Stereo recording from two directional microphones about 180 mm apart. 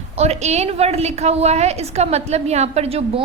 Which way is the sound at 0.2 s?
35° right (ahead or behind).